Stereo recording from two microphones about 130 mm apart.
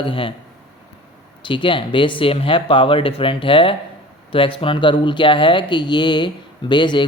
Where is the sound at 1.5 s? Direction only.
40° left (ahead or behind).